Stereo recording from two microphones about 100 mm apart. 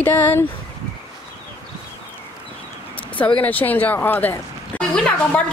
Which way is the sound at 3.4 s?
15° left (ahead or behind).